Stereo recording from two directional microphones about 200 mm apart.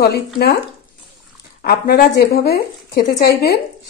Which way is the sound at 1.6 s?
50° left (ahead or behind).